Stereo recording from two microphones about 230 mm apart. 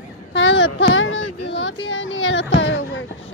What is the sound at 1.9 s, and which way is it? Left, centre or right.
Speech, left.